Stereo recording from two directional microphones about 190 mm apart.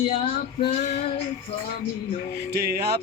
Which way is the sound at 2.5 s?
55° right (ahead or behind).